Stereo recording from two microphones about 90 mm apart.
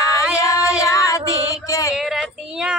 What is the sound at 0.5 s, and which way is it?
Child singing, 35° left (ahead or behind).